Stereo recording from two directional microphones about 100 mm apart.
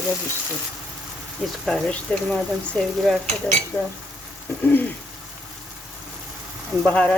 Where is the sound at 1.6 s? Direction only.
10° left (ahead or behind).